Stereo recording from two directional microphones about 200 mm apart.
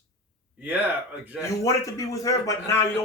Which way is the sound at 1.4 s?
15° left (ahead or behind).